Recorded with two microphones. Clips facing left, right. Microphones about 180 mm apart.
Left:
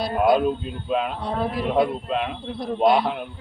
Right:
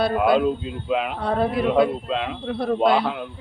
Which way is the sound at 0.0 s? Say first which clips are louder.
Right 1 dB; 75° right (ahead or behind).